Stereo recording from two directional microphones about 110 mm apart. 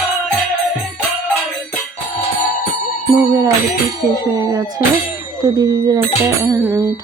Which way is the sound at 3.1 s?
30° right (ahead or behind).